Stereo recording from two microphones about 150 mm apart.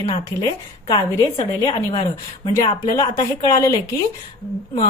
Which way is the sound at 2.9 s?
25° left (ahead or behind).